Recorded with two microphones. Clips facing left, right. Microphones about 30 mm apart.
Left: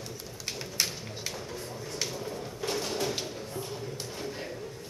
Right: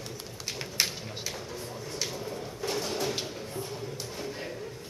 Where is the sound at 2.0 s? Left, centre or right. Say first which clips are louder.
Even; centre.